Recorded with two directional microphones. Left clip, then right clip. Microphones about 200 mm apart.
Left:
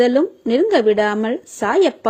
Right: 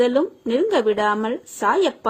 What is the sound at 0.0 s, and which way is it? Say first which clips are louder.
A woman's voice: left 3 dB; 25° left (ahead or behind).